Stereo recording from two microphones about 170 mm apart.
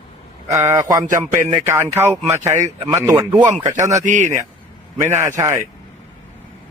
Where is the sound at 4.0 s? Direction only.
45° right (ahead or behind).